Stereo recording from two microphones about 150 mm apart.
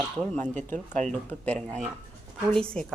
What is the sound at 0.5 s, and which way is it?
Speech, 55° right (ahead or behind).